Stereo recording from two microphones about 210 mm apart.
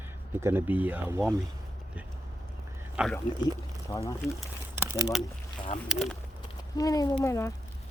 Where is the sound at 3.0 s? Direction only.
5° right (ahead or behind).